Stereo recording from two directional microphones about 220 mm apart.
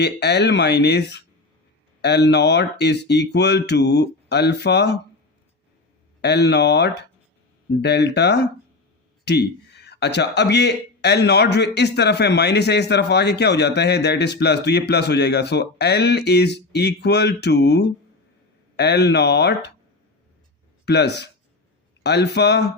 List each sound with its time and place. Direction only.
0.0 s a man's voice: 50° left (ahead or behind)
6.2 s a man's voice: 50° left (ahead or behind)
20.8 s a man's voice: 50° left (ahead or behind)